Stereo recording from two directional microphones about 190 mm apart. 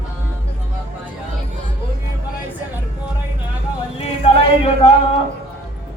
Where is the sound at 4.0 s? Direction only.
30° left (ahead or behind).